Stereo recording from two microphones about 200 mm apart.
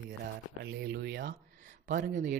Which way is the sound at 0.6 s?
55° right (ahead or behind).